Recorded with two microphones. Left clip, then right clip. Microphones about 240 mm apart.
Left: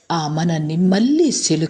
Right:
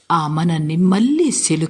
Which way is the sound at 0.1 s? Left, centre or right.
Centre.